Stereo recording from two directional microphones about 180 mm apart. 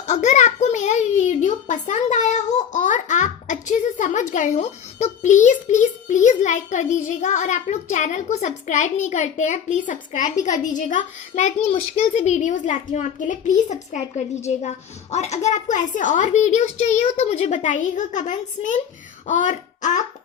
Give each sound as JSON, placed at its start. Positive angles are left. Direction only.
{"t": 0.1, "sound": "a child's voice", "side_deg": 40}
{"t": 19.3, "sound": "wail", "side_deg": 45}